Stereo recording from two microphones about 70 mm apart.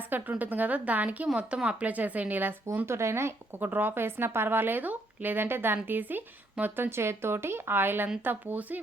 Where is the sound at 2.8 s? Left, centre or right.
Right.